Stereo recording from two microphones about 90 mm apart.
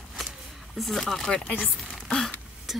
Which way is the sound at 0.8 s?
Centre (ahead or behind).